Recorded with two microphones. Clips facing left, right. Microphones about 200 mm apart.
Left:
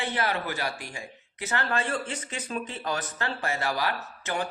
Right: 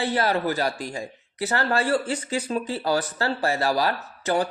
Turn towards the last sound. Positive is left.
turn(degrees=-35)  # may be behind; listen again after turning